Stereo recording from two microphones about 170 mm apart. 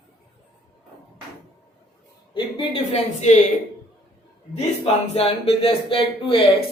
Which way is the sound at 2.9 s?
40° left (ahead or behind).